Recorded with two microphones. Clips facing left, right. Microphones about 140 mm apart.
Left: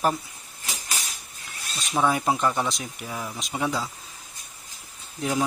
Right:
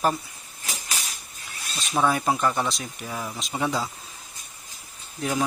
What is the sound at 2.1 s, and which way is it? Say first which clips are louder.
Speech: even; 15° left (ahead or behind).